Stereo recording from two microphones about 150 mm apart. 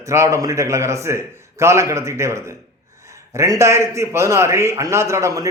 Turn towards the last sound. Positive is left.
turn(degrees=-20)  # may be behind; listen again after turning